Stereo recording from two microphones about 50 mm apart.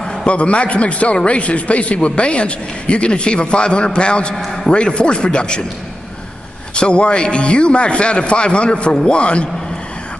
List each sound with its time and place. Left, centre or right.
0.0 s a man's voice: centre
6.7 s a man's voice: left